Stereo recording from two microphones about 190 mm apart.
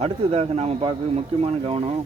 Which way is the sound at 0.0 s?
35° right (ahead or behind).